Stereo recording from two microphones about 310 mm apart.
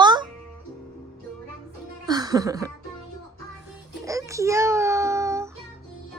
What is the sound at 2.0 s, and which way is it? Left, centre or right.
Music, centre.